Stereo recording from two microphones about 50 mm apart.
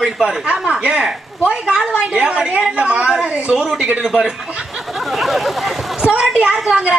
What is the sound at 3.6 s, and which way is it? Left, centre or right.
Speech, centre.